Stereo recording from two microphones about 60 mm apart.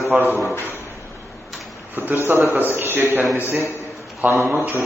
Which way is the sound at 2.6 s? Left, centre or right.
Right.